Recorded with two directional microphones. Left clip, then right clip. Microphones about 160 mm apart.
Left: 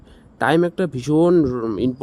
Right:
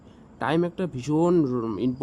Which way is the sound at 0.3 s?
45° left (ahead or behind).